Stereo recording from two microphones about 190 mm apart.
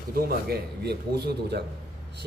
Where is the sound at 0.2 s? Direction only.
55° right (ahead or behind).